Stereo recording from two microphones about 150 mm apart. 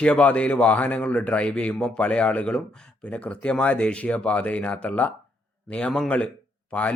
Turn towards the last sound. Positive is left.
turn(degrees=10)  # may be behind; listen again after turning